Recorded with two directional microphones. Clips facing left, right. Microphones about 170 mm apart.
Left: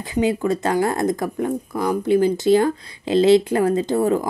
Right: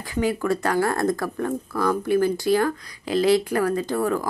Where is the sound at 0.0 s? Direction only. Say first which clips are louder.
Left 4 dB; 20° left (ahead or behind).